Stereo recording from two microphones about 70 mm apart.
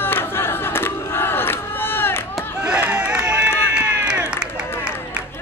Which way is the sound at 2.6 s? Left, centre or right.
Centre.